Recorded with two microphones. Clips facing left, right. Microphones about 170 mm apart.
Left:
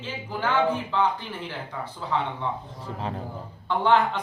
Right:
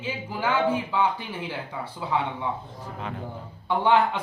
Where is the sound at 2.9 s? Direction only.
35° left (ahead or behind).